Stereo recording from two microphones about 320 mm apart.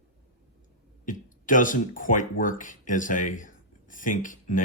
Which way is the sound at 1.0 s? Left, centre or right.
Left.